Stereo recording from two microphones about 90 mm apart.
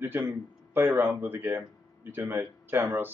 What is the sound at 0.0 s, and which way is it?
Speech, 25° right (ahead or behind).